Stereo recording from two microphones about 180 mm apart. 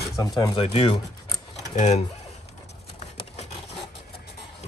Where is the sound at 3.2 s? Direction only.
30° left (ahead or behind).